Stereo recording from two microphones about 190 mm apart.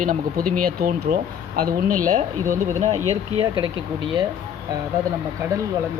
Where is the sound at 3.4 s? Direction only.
25° right (ahead or behind).